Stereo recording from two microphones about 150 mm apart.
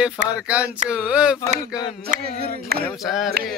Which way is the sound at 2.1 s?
90° right.